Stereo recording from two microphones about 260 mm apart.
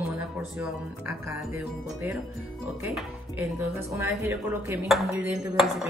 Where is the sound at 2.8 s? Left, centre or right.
Centre.